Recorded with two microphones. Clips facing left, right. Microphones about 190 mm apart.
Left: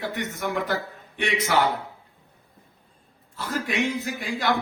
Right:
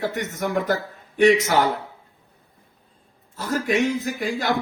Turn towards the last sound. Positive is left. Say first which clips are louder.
# right 2 dB
turn(degrees=-40)  # may be behind; listen again after turning